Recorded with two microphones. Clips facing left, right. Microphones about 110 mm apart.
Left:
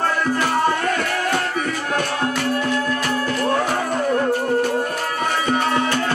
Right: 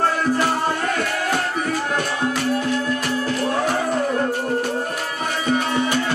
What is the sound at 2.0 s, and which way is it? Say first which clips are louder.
Music: left 1 dB; 50° left (ahead or behind).